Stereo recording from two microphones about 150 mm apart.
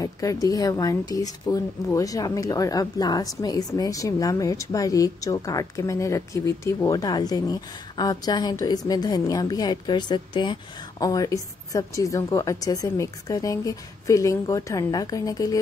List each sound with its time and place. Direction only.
0.0 s speech: 20° left (ahead or behind)